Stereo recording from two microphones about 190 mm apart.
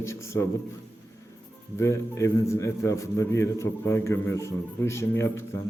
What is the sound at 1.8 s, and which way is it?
A man's voice, 15° left (ahead or behind).